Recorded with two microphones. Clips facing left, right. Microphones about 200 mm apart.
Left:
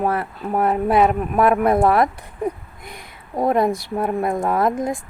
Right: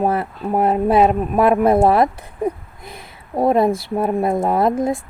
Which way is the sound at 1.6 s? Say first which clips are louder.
Right 2 dB; 25° right (ahead or behind).